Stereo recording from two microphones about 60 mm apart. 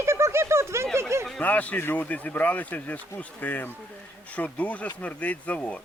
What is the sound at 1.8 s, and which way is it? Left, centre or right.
Speech, left.